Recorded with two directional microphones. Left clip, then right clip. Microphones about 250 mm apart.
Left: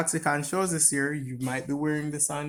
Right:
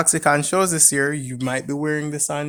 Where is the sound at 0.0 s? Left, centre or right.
Right.